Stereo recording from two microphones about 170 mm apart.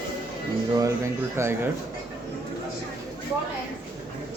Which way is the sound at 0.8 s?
15° right (ahead or behind).